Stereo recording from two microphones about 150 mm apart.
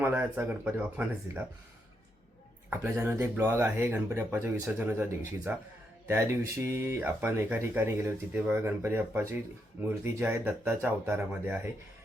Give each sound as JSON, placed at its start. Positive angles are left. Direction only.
{"t": 0.0, "sound": "speech", "side_deg": -15}
{"t": 2.6, "sound": "speech", "side_deg": -15}